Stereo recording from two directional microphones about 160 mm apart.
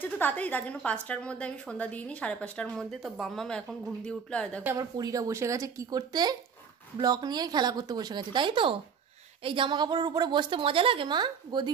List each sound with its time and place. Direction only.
0.0 s a woman's voice: 10° left (ahead or behind)
4.6 s a woman's voice: 25° right (ahead or behind)